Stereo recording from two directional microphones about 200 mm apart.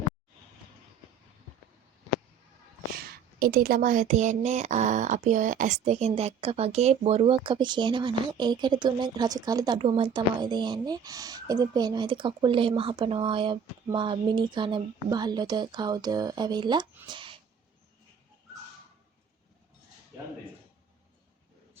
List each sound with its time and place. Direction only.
3.4 s speech: 45° right (ahead or behind); by 17.3 s 25° right (ahead or behind)